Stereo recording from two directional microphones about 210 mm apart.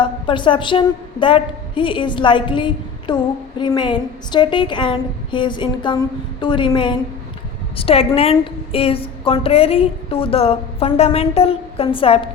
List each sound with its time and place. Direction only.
0.0 s a woman's voice: 25° left (ahead or behind)